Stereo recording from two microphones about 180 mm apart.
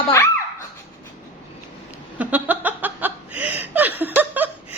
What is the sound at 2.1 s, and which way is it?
Chuckle, 10° right (ahead or behind).